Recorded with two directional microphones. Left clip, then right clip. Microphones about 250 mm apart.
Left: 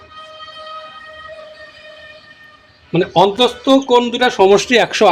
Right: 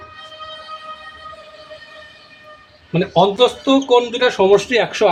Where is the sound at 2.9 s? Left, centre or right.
Left.